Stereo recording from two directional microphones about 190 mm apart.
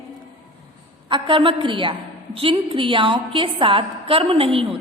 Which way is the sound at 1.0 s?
25° right (ahead or behind).